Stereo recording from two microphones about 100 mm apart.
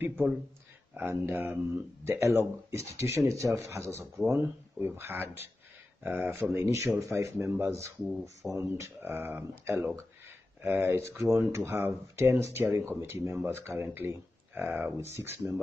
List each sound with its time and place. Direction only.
0.0 s speech: 20° right (ahead or behind)
6.6 s speech: 30° right (ahead or behind)
10.2 s a sound: 20° right (ahead or behind)
11.2 s speech: 25° right (ahead or behind)